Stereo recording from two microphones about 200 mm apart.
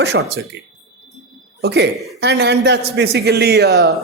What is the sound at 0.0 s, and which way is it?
Speech, 55° right (ahead or behind).